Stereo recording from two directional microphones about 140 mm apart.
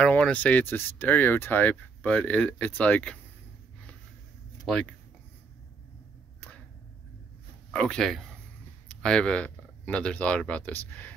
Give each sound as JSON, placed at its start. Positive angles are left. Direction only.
{"t": 0.0, "sound": "speech", "side_deg": 10}
{"t": 4.6, "sound": "speech", "side_deg": 5}
{"t": 7.7, "sound": "speech", "side_deg": 5}